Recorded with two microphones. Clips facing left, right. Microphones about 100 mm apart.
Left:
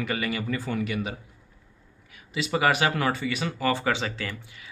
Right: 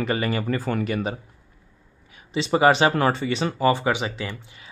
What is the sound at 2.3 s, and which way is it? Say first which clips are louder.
Speech: right 6 dB; 30° right (ahead or behind).